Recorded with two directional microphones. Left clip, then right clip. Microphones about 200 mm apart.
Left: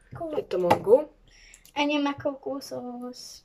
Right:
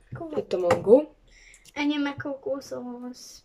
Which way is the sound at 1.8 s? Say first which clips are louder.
Left 2 dB; 10° left (ahead or behind).